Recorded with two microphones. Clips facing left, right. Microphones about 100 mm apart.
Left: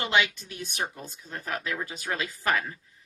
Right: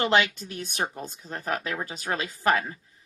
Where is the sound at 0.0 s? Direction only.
40° right (ahead or behind).